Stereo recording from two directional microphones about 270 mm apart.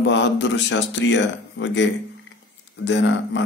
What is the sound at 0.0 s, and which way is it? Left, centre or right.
Speech, left.